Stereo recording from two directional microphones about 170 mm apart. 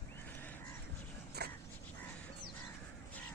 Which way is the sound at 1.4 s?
65° right (ahead or behind).